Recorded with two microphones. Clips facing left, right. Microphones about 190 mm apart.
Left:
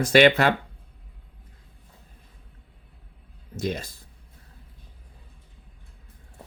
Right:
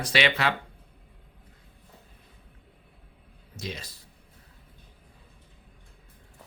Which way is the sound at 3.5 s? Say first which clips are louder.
Left 9 dB; 50° left (ahead or behind).